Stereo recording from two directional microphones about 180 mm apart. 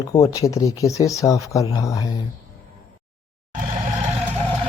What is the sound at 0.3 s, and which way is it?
Speech, 15° left (ahead or behind).